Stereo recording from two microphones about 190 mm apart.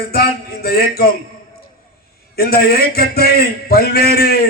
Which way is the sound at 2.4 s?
55° left (ahead or behind).